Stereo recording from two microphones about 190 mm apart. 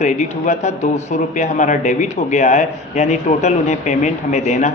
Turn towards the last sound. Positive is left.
turn(degrees=35)  # may be behind; listen again after turning